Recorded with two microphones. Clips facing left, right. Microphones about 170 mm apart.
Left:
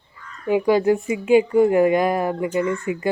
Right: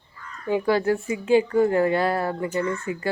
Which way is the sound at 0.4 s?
15° left (ahead or behind).